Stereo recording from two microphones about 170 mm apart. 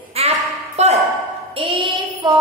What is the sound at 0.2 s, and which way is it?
Ping, 35° right (ahead or behind).